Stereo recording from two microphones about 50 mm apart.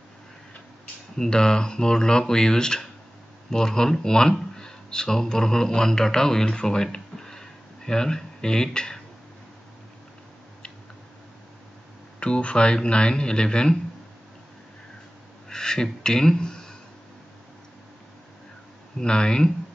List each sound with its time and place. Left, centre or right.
1.1 s speech: centre
12.2 s speech: left
15.5 s speech: centre
18.9 s speech: centre